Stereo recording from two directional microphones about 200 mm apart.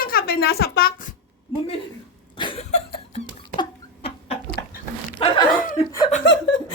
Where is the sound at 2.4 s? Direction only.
25° left (ahead or behind).